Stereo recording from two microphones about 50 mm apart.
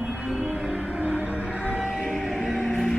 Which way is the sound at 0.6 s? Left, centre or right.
Right.